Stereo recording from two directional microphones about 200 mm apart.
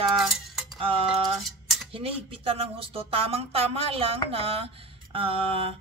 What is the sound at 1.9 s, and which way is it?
A woman's voice, 30° right (ahead or behind).